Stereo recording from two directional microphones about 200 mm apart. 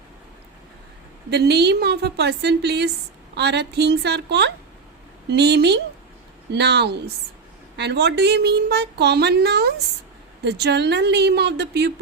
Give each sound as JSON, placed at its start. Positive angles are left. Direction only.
{"t": 1.3, "sound": "a woman's voice", "side_deg": -55}